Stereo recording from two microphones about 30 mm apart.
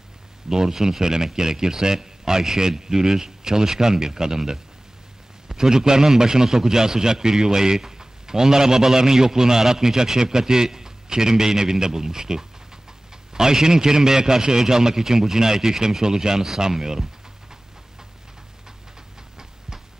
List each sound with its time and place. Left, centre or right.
0.5 s a man's voice: centre